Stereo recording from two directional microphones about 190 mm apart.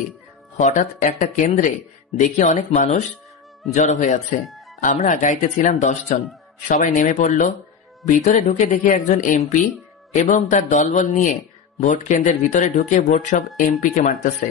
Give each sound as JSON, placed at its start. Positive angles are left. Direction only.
{"t": 0.6, "sound": "speech", "side_deg": 40}